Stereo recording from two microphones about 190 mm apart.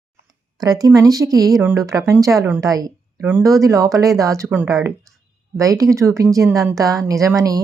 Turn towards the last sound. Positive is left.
turn(degrees=-20)  # may be behind; listen again after turning